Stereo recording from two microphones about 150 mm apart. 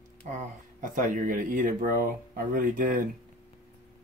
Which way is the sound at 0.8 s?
65° right (ahead or behind).